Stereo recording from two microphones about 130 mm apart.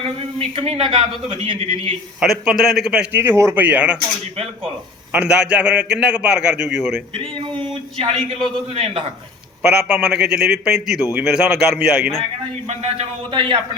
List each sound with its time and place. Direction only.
0.0 s speech: 45° right (ahead or behind)
2.2 s a man's voice: 5° right (ahead or behind)
5.1 s a man's voice: 10° right (ahead or behind)
8.7 s speech: 50° right (ahead or behind)
9.6 s a man's voice: 10° right (ahead or behind)
12.6 s speech: 55° right (ahead or behind)